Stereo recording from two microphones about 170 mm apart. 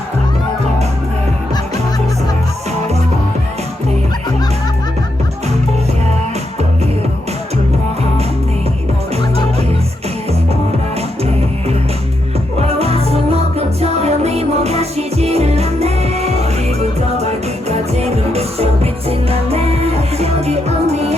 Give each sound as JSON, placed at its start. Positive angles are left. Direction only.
{"t": 12.5, "sound": "music", "side_deg": -35}